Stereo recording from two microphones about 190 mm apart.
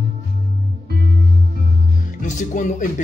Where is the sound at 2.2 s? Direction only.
40° left (ahead or behind).